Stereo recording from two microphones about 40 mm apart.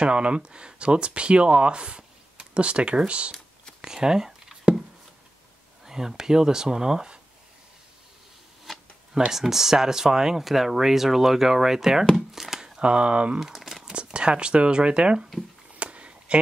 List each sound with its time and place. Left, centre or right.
0.0 s speech: right
3.8 s a sound: centre
5.9 s speech: centre
8.7 s tick-tock: centre
9.3 s speech: centre
12.2 s crumpling: centre
12.8 s speech: right
13.4 s crumpling: centre
13.9 s speech: right
15.8 s a sound: right